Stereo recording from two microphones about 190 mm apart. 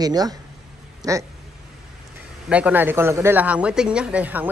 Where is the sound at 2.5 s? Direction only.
10° right (ahead or behind).